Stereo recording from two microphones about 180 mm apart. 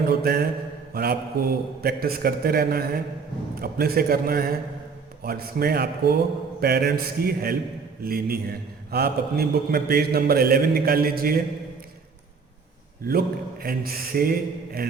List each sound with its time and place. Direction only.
0.1 s a man's voice: 60° right (ahead or behind)
13.1 s a man's voice: 55° right (ahead or behind)